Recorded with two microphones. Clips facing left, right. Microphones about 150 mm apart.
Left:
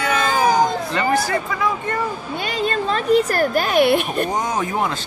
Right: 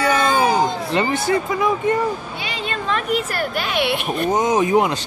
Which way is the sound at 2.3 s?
45° left (ahead or behind).